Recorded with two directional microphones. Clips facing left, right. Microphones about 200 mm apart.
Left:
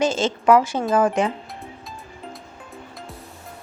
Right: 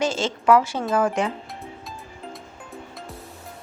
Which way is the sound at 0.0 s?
20° left (ahead or behind).